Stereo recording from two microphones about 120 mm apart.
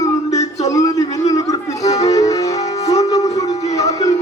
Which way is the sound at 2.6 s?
65° left (ahead or behind).